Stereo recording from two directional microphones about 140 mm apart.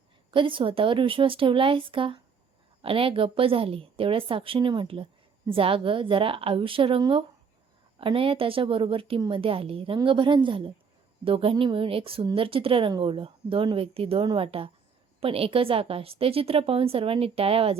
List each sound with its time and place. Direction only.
0.3 s a woman's voice: 35° right (ahead or behind)